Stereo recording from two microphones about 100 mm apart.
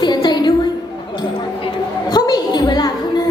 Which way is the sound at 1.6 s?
45° left (ahead or behind).